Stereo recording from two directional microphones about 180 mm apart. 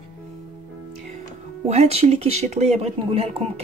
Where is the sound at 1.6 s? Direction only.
35° right (ahead or behind).